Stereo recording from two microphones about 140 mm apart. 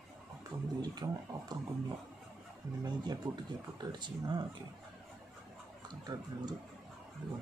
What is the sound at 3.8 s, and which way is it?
Speech, 30° right (ahead or behind).